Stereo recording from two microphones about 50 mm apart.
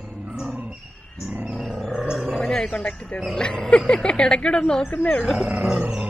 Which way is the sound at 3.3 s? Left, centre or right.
Centre.